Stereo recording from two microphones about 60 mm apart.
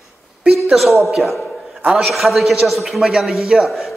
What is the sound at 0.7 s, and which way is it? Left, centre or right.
A man's voice, centre.